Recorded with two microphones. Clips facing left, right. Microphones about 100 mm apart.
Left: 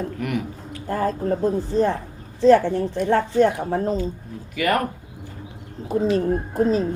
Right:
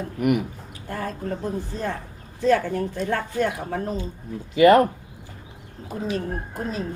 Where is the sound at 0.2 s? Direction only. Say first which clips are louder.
Right 4 dB; 15° right (ahead or behind).